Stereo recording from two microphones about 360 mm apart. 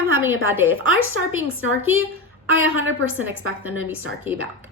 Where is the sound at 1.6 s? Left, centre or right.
Left.